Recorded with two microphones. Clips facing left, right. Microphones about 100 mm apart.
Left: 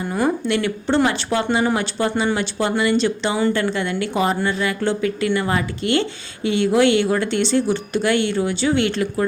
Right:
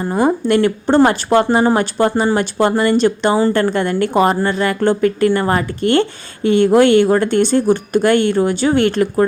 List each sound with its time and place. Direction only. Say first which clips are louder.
0.3 s speech: right 8 dB; 45° right (ahead or behind)